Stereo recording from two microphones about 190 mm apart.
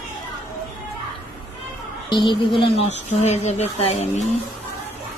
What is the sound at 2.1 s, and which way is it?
Speech, 25° left (ahead or behind).